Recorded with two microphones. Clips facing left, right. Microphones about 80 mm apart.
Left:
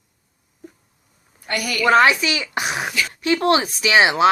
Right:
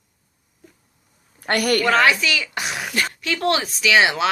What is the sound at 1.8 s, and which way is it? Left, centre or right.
Speech, left.